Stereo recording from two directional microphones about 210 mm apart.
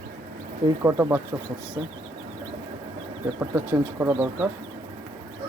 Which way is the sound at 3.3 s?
10° right (ahead or behind).